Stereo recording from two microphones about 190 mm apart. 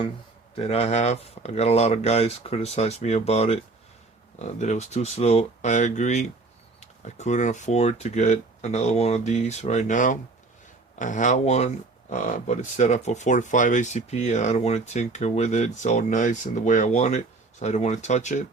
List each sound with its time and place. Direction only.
0.5 s speech: 30° left (ahead or behind)